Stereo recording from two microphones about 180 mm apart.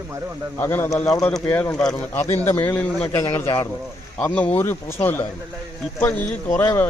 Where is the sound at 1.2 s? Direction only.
10° left (ahead or behind).